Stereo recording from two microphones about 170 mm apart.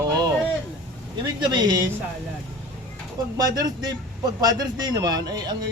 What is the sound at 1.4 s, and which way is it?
Speech, 25° right (ahead or behind).